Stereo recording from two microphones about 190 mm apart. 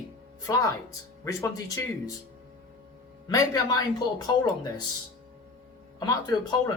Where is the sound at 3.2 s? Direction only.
20° left (ahead or behind).